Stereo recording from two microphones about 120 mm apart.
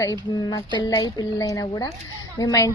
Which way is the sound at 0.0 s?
30° left (ahead or behind).